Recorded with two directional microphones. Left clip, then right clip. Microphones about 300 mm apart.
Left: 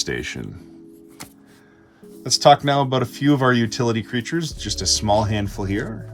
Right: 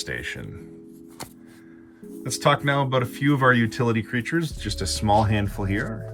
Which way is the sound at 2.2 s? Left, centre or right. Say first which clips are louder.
Left 7 dB; centre.